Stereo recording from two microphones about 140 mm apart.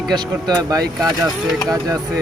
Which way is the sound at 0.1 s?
30° right (ahead or behind).